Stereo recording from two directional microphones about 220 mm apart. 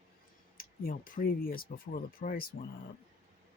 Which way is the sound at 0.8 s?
40° left (ahead or behind).